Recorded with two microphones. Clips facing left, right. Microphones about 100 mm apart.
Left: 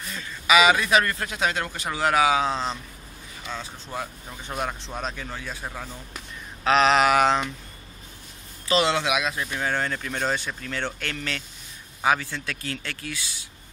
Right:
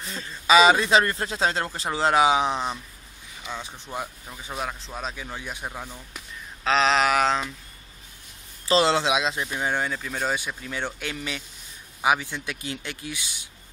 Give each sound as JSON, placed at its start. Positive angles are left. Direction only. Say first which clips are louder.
{"t": 0.1, "sound": "a man's voice", "louder": "right 2 dB", "side_deg": -30}
{"t": 4.3, "sound": "speech", "louder": "left 4 dB", "side_deg": -5}
{"t": 6.6, "sound": "speech", "louder": "left 2 dB", "side_deg": 5}
{"t": 8.6, "sound": "speech", "louder": "right 2 dB", "side_deg": -30}